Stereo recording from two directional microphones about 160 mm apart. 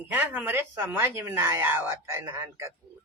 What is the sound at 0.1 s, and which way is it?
Speech, 10° right (ahead or behind).